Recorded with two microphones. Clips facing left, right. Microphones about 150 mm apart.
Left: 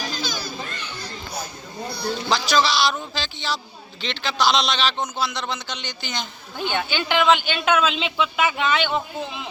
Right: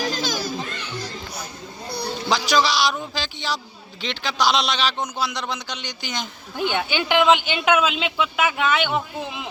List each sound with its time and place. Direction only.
0.0 s children playing: 90° right
2.3 s a man's voice: 15° right (ahead or behind)